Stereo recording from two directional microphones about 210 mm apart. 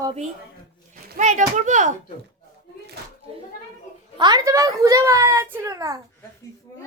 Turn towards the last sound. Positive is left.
turn(degrees=-15)  # may be behind; listen again after turning